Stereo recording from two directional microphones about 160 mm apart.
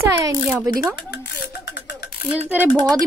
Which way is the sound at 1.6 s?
90° left.